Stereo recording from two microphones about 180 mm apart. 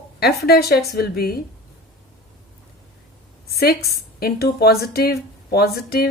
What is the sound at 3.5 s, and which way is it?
A woman's voice, 60° left (ahead or behind).